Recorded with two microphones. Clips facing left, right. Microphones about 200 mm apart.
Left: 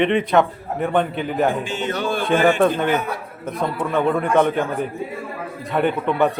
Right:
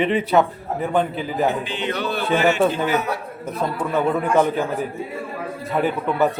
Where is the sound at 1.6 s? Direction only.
45° left (ahead or behind).